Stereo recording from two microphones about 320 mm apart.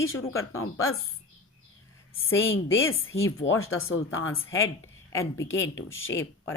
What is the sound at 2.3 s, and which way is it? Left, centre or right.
Speech, left.